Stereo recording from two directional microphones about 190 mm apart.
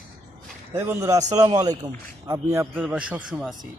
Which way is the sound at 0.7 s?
10° right (ahead or behind).